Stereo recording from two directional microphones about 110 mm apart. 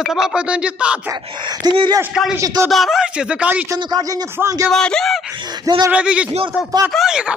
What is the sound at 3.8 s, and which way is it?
Speech, 35° right (ahead or behind).